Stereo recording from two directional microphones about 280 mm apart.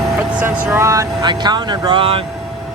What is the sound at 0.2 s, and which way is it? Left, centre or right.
Speech, centre.